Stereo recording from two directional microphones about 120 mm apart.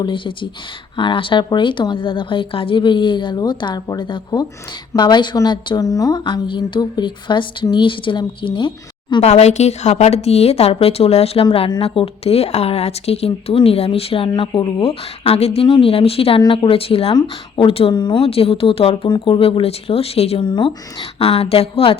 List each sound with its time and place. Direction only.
0.0 s a woman's voice: 45° left (ahead or behind)
9.2 s speech: 65° left (ahead or behind)
14.3 s speech: 40° left (ahead or behind); by 15.6 s 55° left (ahead or behind)
15.6 s speech: 45° left (ahead or behind)
16.4 s speech: 40° left (ahead or behind)
17.9 s a woman's voice: 40° left (ahead or behind)
18.3 s speech: 55° left (ahead or behind)
19.0 s a woman's voice: 40° left (ahead or behind)
19.3 s speech: 50° left (ahead or behind)
20.4 s a woman's voice: 40° left (ahead or behind)
21.2 s speech: 55° left (ahead or behind)